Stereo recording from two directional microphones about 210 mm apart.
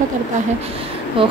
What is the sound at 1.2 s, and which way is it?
Speech, 25° right (ahead or behind).